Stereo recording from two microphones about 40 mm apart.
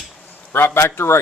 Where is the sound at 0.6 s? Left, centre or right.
Left.